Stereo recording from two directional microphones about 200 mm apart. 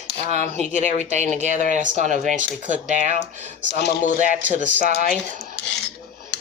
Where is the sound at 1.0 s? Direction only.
35° right (ahead or behind).